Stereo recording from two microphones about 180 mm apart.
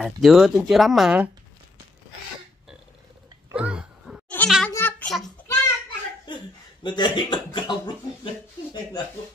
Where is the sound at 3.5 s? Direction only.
5° right (ahead or behind).